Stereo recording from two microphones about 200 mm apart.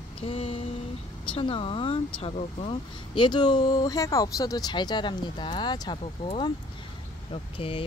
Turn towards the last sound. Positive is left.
turn(degrees=25)  # may be behind; listen again after turning